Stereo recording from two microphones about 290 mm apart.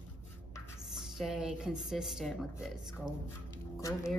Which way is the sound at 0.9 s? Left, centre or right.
Centre.